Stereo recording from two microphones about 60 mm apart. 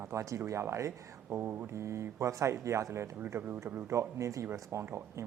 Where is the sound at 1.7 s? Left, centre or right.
Right.